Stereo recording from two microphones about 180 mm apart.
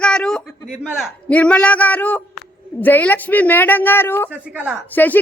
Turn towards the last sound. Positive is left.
turn(degrees=10)  # may be behind; listen again after turning